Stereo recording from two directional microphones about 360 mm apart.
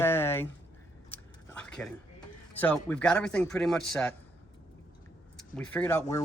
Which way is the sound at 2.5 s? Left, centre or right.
Centre.